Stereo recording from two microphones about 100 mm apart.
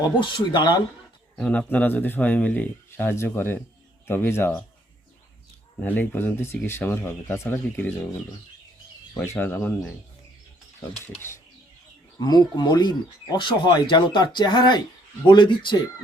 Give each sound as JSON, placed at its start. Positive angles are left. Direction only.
{"t": 0.2, "sound": "speech", "side_deg": 50}
{"t": 1.4, "sound": "speech", "side_deg": 15}
{"t": 5.8, "sound": "speech", "side_deg": 15}
{"t": 9.1, "sound": "speech", "side_deg": 20}
{"t": 10.8, "sound": "speech", "side_deg": 25}
{"t": 12.2, "sound": "speech", "side_deg": 45}